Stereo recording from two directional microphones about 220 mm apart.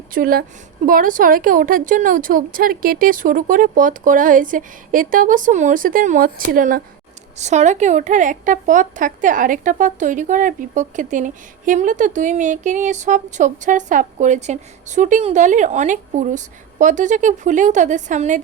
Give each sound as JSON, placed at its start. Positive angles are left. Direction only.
{"t": 0.1, "sound": "a woman's voice", "side_deg": -40}